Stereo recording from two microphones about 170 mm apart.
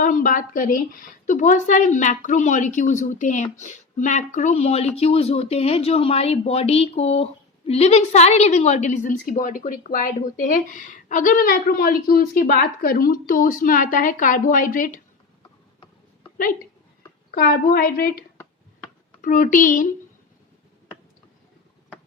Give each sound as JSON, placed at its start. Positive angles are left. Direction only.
{"t": 0.0, "sound": "a woman's voice", "side_deg": 50}
{"t": 17.3, "sound": "a woman's voice", "side_deg": 60}
{"t": 19.2, "sound": "a woman's voice", "side_deg": 50}